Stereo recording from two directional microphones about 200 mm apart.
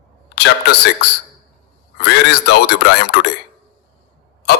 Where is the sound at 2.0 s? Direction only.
55° left (ahead or behind).